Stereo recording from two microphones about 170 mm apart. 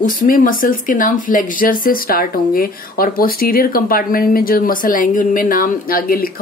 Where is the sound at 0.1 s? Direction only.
55° left (ahead or behind).